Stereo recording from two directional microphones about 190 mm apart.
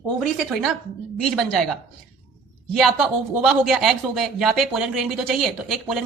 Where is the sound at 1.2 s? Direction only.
Centre (ahead or behind).